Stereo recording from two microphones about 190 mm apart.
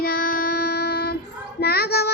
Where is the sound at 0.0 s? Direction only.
50° left (ahead or behind).